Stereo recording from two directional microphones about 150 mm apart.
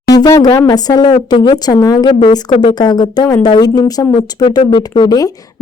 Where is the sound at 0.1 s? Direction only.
25° left (ahead or behind).